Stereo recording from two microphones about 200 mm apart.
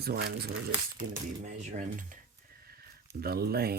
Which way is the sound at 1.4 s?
40° right (ahead or behind).